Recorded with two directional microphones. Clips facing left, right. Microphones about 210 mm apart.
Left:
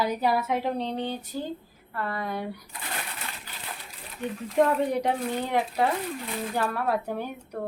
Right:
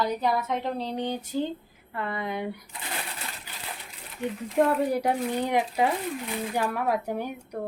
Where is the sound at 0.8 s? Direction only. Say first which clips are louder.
Even; 15° right (ahead or behind).